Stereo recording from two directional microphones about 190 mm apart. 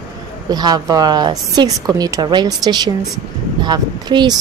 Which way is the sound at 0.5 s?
20° right (ahead or behind).